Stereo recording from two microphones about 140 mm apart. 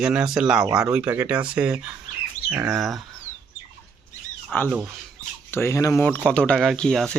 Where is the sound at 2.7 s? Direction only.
Centre (ahead or behind).